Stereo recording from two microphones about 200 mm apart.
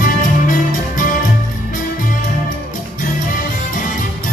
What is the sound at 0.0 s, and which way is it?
Music, 40° left (ahead or behind).